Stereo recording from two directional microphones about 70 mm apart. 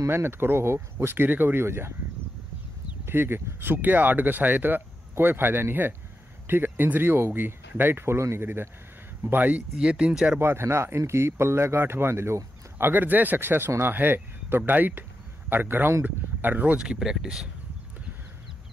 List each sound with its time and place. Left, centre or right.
0.1 s speech: right
3.1 s speech: right
9.8 s speech: centre
10.4 s speech: right
16.7 s speech: centre